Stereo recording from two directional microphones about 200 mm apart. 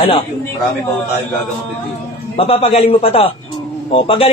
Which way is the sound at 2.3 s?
30° left (ahead or behind).